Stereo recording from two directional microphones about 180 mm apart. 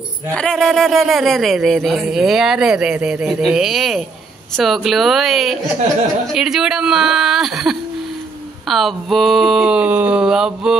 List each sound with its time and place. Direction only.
0.4 s speech: 5° left (ahead or behind)